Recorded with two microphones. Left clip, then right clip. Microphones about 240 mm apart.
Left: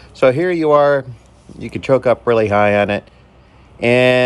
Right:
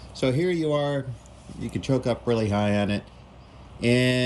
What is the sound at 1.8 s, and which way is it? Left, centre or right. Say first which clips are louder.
Speech: left 13 dB; centre.